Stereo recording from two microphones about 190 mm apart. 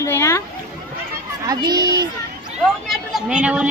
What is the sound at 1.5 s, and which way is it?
Speech, 20° right (ahead or behind).